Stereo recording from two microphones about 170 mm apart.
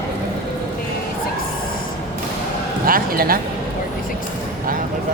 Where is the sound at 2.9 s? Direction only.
60° right (ahead or behind).